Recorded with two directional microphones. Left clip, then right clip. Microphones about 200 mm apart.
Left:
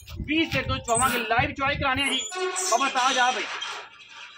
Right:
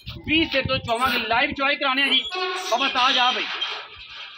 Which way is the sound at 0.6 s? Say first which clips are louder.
Right 3 dB; 35° right (ahead or behind).